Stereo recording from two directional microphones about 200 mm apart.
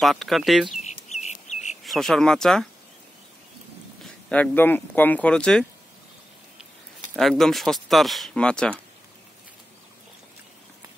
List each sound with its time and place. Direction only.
0.0 s speech: centre (ahead or behind)
0.8 s chicken: 35° left (ahead or behind)
1.9 s speech: centre (ahead or behind)
4.0 s speech: 5° left (ahead or behind)
7.2 s speech: centre (ahead or behind)